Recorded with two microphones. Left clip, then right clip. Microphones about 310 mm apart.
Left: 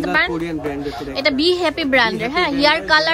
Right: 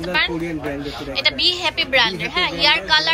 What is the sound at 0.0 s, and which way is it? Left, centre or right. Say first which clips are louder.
A woman's voice: left 2 dB; left.